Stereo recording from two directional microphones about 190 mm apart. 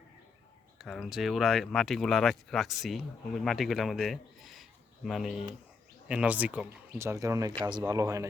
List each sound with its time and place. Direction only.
0.8 s speech: centre (ahead or behind); by 8.3 s 15° right (ahead or behind)